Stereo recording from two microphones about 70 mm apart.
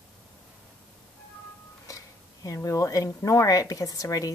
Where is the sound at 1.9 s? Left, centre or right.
Left.